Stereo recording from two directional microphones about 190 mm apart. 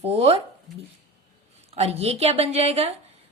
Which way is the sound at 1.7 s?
35° right (ahead or behind).